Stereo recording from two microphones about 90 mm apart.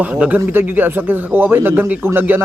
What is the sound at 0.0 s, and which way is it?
A man's voice, 15° right (ahead or behind).